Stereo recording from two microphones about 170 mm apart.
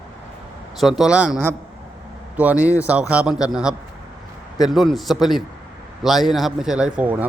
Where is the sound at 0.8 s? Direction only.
Centre (ahead or behind).